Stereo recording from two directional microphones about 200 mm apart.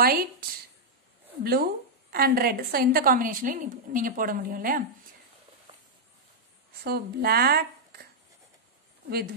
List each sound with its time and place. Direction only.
0.0 s a woman's voice: 50° right (ahead or behind)
6.8 s speech: 50° right (ahead or behind)